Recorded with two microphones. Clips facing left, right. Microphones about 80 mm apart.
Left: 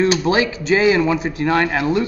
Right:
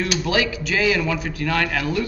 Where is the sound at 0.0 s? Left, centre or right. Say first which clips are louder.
Left 6 dB; left.